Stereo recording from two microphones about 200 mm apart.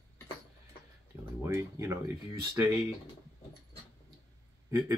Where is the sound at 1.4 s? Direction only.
10° right (ahead or behind).